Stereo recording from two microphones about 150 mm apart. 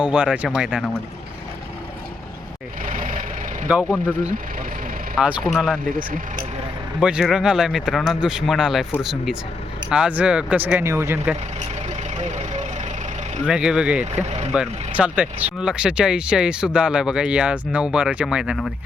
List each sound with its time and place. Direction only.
0.0 s speech: 10° right (ahead or behind)
2.8 s vehicle: 60° right (ahead or behind)
5.1 s speech: 5° right (ahead or behind)
12.1 s vehicle: 50° right (ahead or behind)
13.4 s speech: 5° right (ahead or behind)
14.3 s speech: 45° right (ahead or behind)
14.5 s speech: 10° right (ahead or behind)